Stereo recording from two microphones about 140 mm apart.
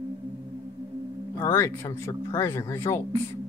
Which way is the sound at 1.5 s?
20° left (ahead or behind).